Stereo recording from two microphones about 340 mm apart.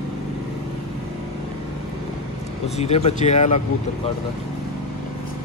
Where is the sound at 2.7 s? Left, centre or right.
Centre.